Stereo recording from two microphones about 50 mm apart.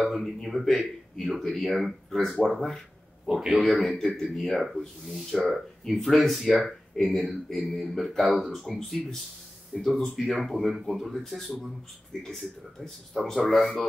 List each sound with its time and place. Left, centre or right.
0.0 s speech: centre